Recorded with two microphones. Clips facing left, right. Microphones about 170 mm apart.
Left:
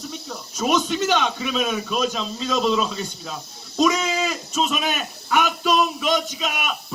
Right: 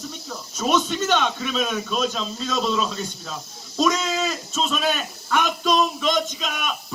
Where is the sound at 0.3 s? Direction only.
Centre (ahead or behind).